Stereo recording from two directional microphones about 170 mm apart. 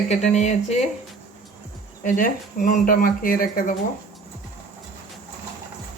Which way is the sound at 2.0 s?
50° left (ahead or behind).